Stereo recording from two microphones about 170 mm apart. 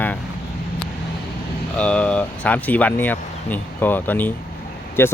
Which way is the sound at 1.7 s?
5° left (ahead or behind).